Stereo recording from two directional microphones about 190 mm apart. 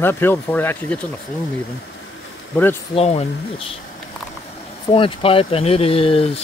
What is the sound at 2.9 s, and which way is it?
Speech, 35° left (ahead or behind).